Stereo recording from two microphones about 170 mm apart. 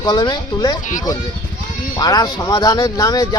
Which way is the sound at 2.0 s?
25° left (ahead or behind).